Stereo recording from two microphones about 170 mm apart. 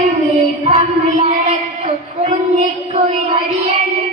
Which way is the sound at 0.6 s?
40° right (ahead or behind).